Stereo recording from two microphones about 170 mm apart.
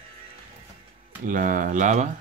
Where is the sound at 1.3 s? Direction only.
50° right (ahead or behind).